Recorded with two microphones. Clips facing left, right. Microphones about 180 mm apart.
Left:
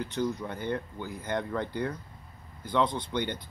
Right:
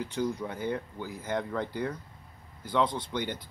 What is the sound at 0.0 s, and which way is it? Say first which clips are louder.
Speech: even; 10° right (ahead or behind).